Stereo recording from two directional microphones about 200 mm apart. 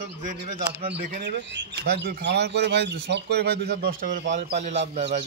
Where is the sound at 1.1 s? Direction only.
55° right (ahead or behind).